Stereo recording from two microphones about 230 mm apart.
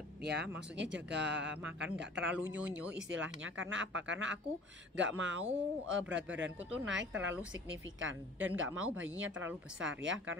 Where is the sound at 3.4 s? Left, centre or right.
Right.